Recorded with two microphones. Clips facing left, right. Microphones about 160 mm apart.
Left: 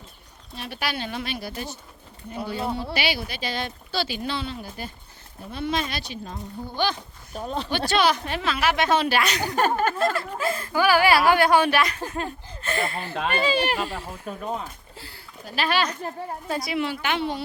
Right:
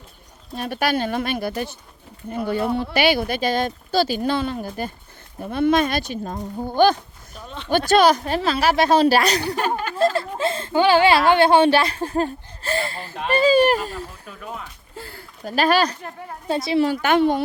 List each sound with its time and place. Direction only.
0.5 s speech: 50° right (ahead or behind)
7.3 s speech: 40° left (ahead or behind)
7.9 s a woman's voice: 45° right (ahead or behind)
9.6 s a sound: 45° left (ahead or behind)
10.0 s speech: 30° right (ahead or behind)
13.3 s speech: 40° right (ahead or behind)
14.1 s speech: 40° left (ahead or behind)
14.9 s speech: 50° right (ahead or behind)
16.5 s speech: 25° right (ahead or behind)
16.8 s speech: 45° right (ahead or behind)